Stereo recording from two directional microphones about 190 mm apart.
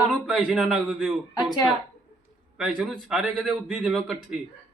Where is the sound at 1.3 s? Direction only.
15° left (ahead or behind).